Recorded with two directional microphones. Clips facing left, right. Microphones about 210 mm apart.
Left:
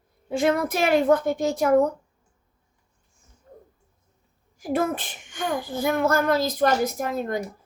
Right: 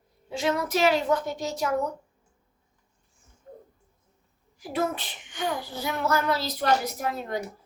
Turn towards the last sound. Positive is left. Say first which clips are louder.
# left 4 dB
turn(degrees=50)  # may be behind; listen again after turning